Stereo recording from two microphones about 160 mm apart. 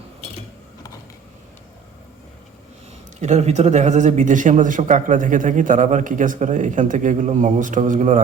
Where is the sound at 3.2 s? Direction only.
45° right (ahead or behind).